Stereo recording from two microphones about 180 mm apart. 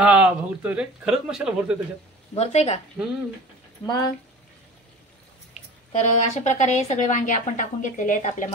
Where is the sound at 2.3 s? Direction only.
35° left (ahead or behind).